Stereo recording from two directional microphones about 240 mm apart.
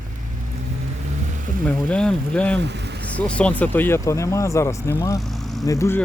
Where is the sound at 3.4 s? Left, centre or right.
Centre.